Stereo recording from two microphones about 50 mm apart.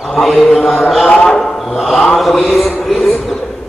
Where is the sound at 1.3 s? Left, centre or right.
Centre.